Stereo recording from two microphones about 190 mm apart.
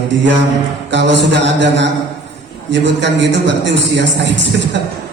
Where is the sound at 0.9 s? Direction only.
70° right (ahead or behind).